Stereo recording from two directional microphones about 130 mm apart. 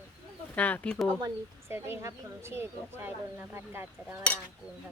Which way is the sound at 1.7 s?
20° right (ahead or behind).